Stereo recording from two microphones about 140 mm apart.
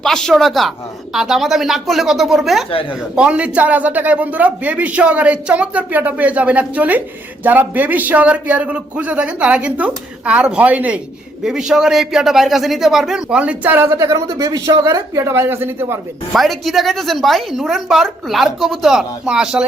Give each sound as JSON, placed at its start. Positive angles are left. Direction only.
{"t": 0.0, "sound": "a woman's voice", "side_deg": 5}
{"t": 13.9, "sound": "speech", "side_deg": -20}
{"t": 16.3, "sound": "a woman's voice", "side_deg": 0}